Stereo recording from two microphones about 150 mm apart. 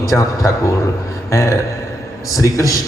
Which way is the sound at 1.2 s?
20° left (ahead or behind).